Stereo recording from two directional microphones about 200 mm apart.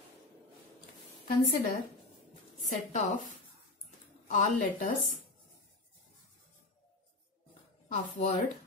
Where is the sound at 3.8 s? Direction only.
40° left (ahead or behind).